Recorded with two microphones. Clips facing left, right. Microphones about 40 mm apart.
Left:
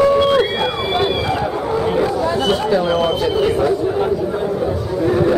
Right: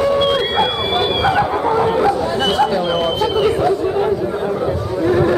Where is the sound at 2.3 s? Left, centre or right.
Centre.